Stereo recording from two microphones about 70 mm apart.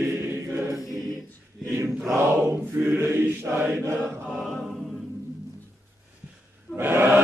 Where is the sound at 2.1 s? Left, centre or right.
Right.